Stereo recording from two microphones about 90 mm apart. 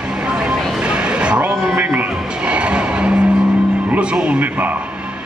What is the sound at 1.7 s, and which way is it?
Music, 25° right (ahead or behind).